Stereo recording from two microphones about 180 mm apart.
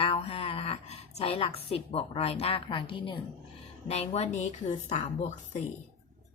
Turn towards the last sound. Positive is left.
turn(degrees=40)  # may be behind; listen again after turning